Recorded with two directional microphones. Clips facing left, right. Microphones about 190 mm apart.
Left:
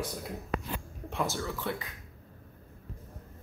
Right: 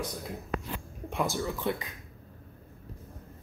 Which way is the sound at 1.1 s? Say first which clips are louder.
Right 2 dB; 15° right (ahead or behind).